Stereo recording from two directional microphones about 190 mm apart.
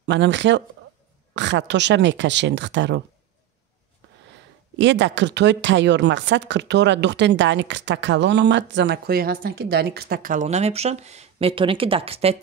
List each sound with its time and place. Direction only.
0.0 s speech: 70° right (ahead or behind)
4.7 s a woman's voice: 70° right (ahead or behind); by 12.4 s 30° right (ahead or behind)